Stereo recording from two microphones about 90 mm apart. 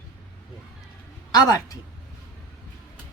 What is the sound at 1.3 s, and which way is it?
Speech, 40° left (ahead or behind).